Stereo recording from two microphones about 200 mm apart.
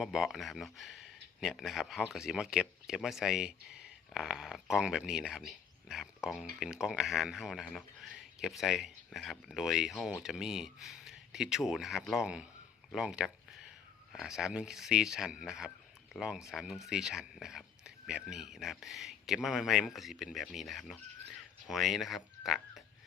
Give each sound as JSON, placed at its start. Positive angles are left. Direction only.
{"t": 0.0, "sound": "speech", "side_deg": 0}